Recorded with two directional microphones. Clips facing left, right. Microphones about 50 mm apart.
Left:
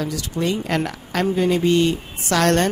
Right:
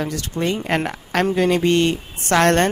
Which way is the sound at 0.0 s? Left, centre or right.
Right.